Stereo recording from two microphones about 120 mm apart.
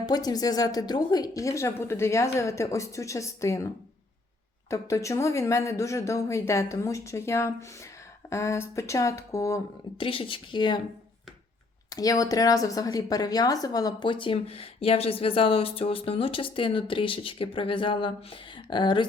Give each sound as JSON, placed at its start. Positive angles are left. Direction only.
{"t": 0.0, "sound": "a woman's voice", "side_deg": 35}
{"t": 4.7, "sound": "a woman's voice", "side_deg": 25}
{"t": 10.0, "sound": "a woman's voice", "side_deg": 45}
{"t": 11.9, "sound": "a woman's voice", "side_deg": 30}